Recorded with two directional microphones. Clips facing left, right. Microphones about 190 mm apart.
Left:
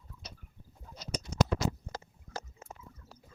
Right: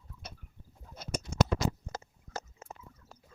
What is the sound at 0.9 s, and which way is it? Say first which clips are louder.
Bird: right 1 dB; 50° right (ahead or behind).